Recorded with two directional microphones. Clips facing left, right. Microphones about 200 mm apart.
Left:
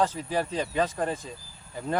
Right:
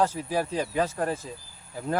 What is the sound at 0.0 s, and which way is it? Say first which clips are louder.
Speech: right 1 dB; 10° right (ahead or behind).